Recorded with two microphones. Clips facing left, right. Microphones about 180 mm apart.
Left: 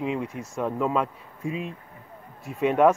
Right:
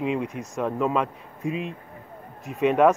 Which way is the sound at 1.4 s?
70° right (ahead or behind).